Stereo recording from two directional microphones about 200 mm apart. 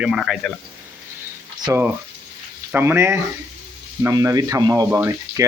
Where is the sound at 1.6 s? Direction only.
10° right (ahead or behind).